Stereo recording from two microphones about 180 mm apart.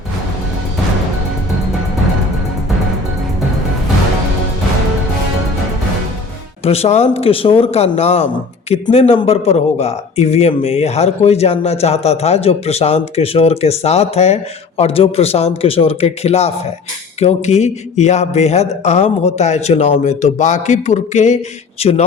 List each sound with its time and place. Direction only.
6.7 s a man's voice: 35° left (ahead or behind)